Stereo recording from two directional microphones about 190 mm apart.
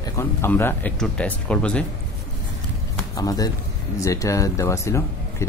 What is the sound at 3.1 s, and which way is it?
Speech, 20° left (ahead or behind).